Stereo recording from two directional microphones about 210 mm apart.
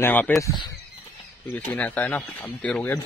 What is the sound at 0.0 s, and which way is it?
Speech, 10° left (ahead or behind).